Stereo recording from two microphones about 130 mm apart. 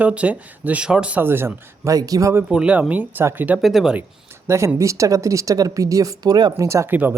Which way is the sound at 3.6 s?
Centre (ahead or behind).